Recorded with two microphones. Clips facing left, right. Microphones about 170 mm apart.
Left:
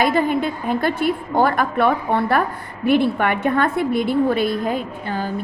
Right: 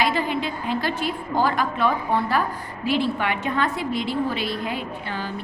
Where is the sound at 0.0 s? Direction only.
50° left (ahead or behind).